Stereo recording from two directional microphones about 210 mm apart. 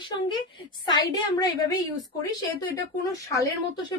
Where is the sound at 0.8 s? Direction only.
20° left (ahead or behind).